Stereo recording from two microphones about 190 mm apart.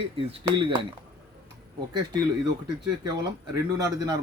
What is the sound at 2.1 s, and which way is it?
Speech, 20° right (ahead or behind).